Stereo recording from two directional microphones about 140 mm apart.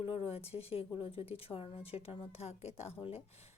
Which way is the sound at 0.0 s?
45° left (ahead or behind).